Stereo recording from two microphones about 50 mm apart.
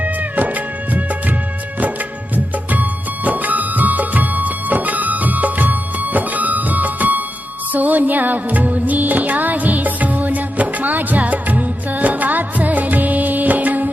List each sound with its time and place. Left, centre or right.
0.0 s music: right
2.3 s music: right